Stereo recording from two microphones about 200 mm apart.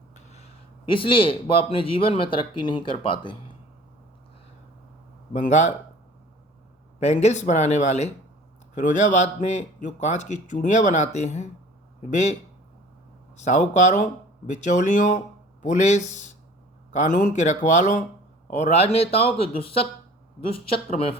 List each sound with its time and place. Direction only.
0.1 s a sound: 35° left (ahead or behind)
0.9 s a man's voice: 25° left (ahead or behind)
5.3 s a man's voice: 40° left (ahead or behind)
7.0 s a man's voice: 35° left (ahead or behind)